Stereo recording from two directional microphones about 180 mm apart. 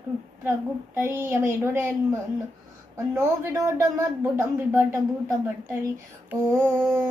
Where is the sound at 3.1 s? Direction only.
15° right (ahead or behind).